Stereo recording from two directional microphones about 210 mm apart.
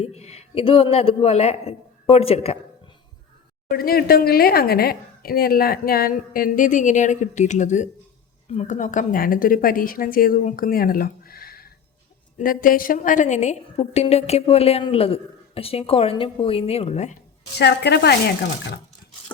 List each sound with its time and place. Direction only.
0.0 s a woman's voice: 30° left (ahead or behind)
3.7 s a woman's voice: 45° left (ahead or behind)
17.6 s speech: 55° left (ahead or behind)